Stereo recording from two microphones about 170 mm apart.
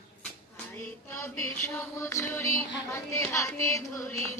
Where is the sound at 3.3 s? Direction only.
15° left (ahead or behind).